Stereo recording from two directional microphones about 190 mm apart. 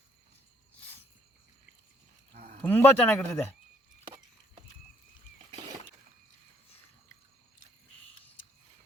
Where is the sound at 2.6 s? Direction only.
10° left (ahead or behind).